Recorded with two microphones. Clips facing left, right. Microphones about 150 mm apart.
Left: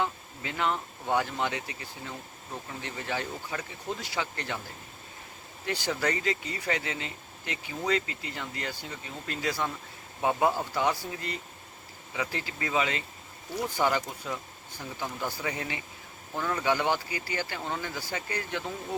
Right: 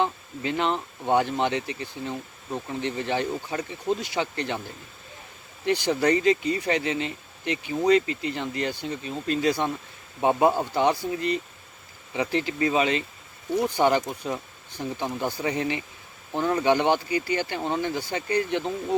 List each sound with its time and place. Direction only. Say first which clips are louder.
0.0 s speech: right 6 dB; 25° right (ahead or behind)
5.6 s speech: right 8 dB; 20° right (ahead or behind)